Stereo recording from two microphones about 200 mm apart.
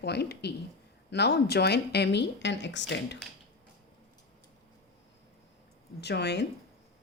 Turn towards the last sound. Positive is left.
turn(degrees=55)  # may be behind; listen again after turning